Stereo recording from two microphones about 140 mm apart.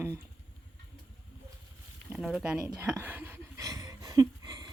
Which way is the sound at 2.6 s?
20° right (ahead or behind).